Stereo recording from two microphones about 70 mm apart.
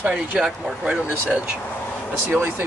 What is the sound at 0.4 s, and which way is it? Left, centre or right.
Speech, centre.